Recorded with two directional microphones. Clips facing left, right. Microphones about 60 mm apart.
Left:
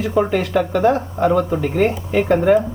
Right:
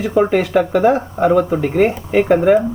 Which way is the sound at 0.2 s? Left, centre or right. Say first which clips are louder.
Right 4 dB; centre.